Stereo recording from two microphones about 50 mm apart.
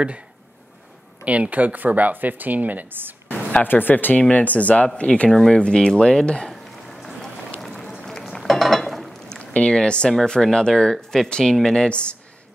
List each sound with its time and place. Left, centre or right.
1.2 s speech: right
3.6 s speech: left
5.3 s speech: centre
7.6 s run: centre
8.2 s a sound: centre
9.4 s speech: left